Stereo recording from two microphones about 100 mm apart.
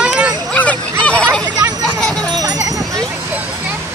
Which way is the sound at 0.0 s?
10° right (ahead or behind).